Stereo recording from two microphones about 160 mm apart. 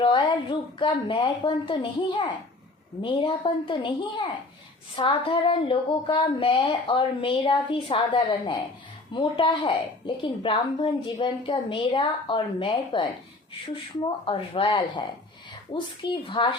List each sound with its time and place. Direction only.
0.0 s speech: 30° left (ahead or behind)
14.3 s speech: 35° left (ahead or behind)